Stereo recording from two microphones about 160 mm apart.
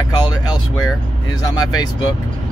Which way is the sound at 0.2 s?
25° left (ahead or behind).